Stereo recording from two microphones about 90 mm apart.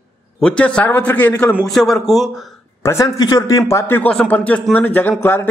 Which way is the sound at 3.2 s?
40° left (ahead or behind).